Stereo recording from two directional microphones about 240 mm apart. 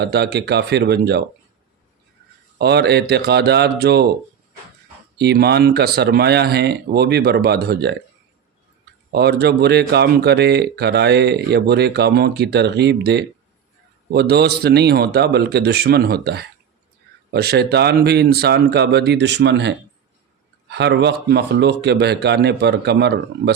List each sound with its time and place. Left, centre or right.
0.0 s speech: right
2.6 s speech: right
5.1 s speech: right
9.1 s speech: right